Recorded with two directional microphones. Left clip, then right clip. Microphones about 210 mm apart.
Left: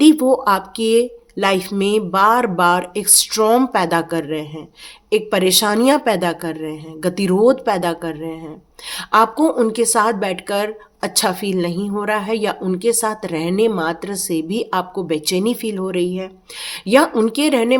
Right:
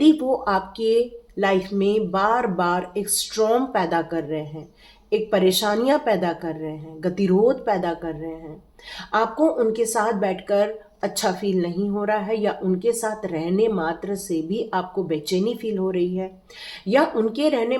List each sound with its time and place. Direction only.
0.0 s a woman's voice: 40° left (ahead or behind)